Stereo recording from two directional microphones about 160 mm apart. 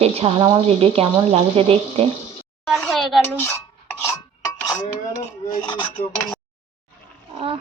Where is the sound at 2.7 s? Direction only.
Centre (ahead or behind).